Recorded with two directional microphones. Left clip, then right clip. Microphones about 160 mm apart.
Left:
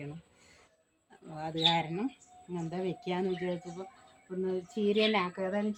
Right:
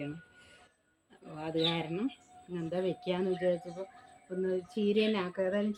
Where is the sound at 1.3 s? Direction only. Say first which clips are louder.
Left 3 dB; 20° left (ahead or behind).